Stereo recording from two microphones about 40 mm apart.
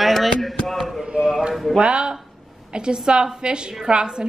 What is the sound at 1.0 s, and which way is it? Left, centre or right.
A woman's voice, centre.